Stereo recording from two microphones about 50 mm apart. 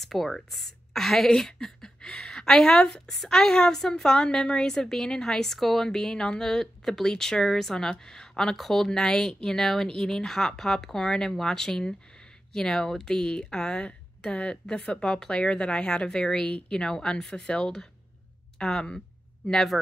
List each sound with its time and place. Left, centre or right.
0.0 s a woman's voice: centre